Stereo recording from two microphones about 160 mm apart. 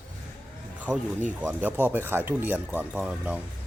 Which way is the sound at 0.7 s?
10° right (ahead or behind).